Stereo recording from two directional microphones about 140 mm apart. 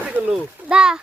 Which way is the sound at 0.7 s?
5° right (ahead or behind).